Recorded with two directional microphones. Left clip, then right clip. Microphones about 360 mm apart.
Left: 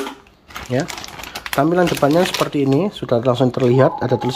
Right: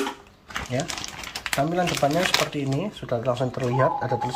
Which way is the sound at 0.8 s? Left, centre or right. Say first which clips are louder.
Left 8 dB; centre.